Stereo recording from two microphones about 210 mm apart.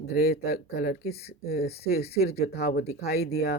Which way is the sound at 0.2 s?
45° left (ahead or behind).